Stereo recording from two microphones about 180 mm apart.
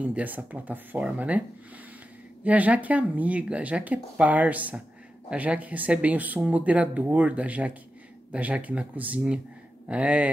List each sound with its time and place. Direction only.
0.0 s speech: 10° right (ahead or behind)
2.4 s speech: 10° right (ahead or behind)